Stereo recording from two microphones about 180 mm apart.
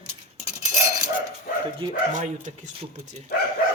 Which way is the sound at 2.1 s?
40° right (ahead or behind).